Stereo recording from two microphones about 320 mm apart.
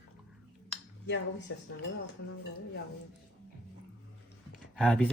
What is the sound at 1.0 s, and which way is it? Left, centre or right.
Speech, left.